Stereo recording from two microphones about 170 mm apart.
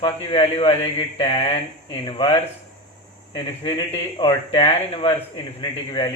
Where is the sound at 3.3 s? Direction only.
30° left (ahead or behind).